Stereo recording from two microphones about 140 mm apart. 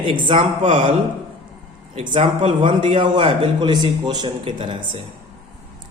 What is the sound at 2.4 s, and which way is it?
A man's voice, 40° right (ahead or behind).